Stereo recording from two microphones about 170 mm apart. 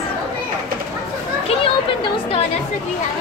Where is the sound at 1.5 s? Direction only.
30° left (ahead or behind).